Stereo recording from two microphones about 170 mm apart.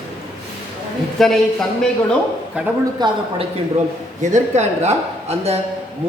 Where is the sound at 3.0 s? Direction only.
25° right (ahead or behind).